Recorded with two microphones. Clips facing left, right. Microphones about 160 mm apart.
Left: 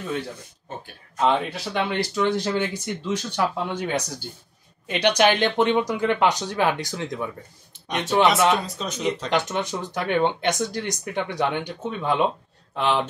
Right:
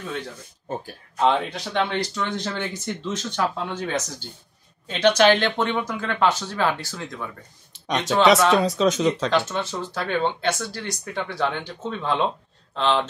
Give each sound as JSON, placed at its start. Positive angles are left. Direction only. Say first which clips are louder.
{"t": 1.2, "sound": "speech", "louder": "right 1 dB", "side_deg": 5}
{"t": 7.7, "sound": "speech", "louder": "even", "side_deg": -90}
{"t": 9.3, "sound": "speech", "louder": "even", "side_deg": 15}